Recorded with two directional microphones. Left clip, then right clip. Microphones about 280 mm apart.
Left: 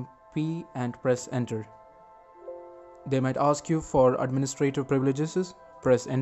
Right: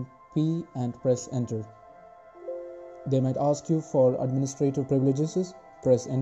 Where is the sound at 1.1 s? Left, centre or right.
Left.